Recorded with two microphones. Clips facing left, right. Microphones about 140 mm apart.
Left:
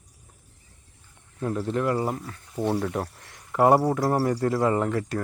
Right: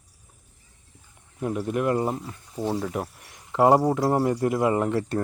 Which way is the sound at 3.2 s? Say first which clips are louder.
Right 1 dB; 20° right (ahead or behind).